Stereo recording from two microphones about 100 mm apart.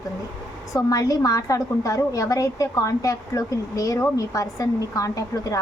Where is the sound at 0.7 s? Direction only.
35° left (ahead or behind).